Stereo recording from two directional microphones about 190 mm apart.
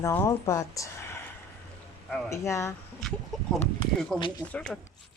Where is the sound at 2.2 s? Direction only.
15° left (ahead or behind).